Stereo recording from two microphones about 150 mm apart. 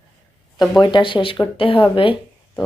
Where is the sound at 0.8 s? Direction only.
30° left (ahead or behind).